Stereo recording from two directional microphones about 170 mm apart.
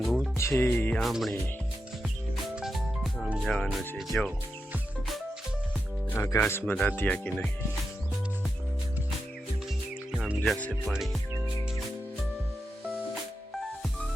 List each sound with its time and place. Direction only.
0.3 s speech: 15° left (ahead or behind)
1.0 s speech: centre (ahead or behind)
2.6 s music: centre (ahead or behind)
3.4 s speech: 5° left (ahead or behind)
4.7 s music: centre (ahead or behind)
6.1 s speech: 15° left (ahead or behind)
10.1 s speech: centre (ahead or behind)